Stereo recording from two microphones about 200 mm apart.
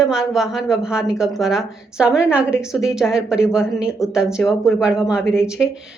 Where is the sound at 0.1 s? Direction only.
5° right (ahead or behind).